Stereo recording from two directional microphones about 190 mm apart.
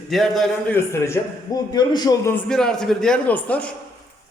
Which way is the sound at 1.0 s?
15° left (ahead or behind).